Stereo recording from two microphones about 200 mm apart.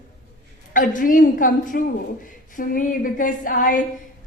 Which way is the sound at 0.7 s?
40° left (ahead or behind).